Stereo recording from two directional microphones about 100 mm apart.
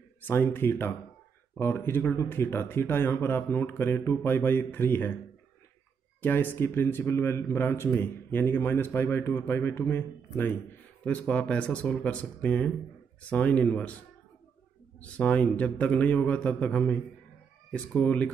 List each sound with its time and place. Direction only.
0.2 s speech: 20° left (ahead or behind)
6.2 s a man's voice: 20° left (ahead or behind)
15.0 s a man's voice: 15° left (ahead or behind)